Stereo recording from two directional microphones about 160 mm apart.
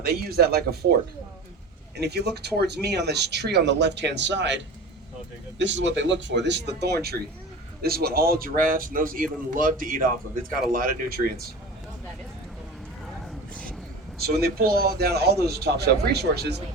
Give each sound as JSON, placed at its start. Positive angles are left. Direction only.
{"t": 0.0, "sound": "speech", "side_deg": -75}
{"t": 2.0, "sound": "speech", "side_deg": -90}
{"t": 7.8, "sound": "speech", "side_deg": -70}
{"t": 14.2, "sound": "a man's voice", "side_deg": -75}